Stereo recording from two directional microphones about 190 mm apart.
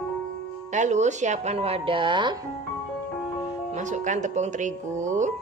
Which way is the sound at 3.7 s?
40° right (ahead or behind).